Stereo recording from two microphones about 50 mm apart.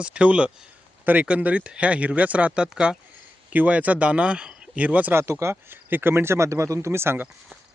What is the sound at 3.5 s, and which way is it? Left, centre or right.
Speech, right.